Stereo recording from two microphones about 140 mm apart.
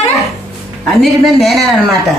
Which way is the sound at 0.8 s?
Centre (ahead or behind).